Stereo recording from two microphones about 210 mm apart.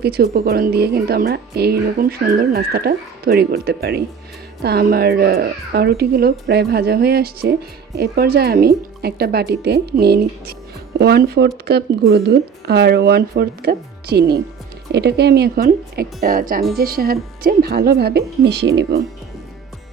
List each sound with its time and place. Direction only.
0.0 s speech: 50° right (ahead or behind)